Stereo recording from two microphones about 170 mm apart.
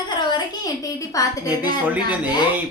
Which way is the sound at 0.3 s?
25° left (ahead or behind).